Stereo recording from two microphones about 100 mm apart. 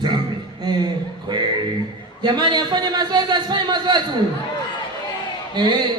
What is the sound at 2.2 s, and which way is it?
A man's voice, 50° right (ahead or behind).